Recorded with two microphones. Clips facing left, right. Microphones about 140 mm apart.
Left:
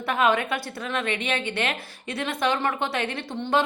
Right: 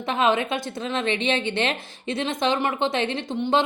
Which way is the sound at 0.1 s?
20° right (ahead or behind).